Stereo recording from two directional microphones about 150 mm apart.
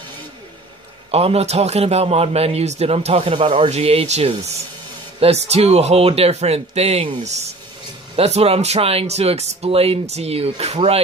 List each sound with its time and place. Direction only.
1.1 s a man's voice: 40° right (ahead or behind)